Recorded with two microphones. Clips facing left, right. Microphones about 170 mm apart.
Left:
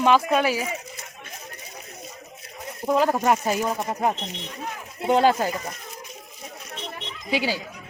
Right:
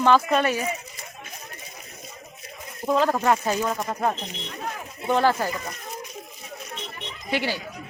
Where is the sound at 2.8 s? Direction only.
10° left (ahead or behind).